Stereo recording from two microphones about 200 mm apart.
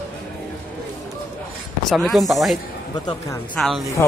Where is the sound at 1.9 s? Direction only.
Centre (ahead or behind).